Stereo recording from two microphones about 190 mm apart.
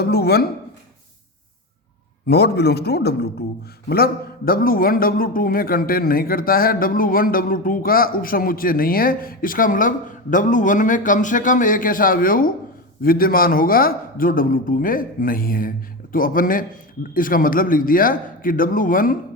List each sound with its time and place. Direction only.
0.0 s speech: 55° left (ahead or behind)
2.2 s a man's voice: 60° left (ahead or behind)